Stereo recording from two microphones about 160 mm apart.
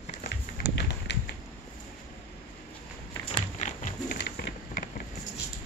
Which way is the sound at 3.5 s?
45° left (ahead or behind).